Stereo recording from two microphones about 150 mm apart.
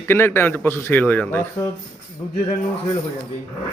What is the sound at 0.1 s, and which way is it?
A man's voice, 15° left (ahead or behind).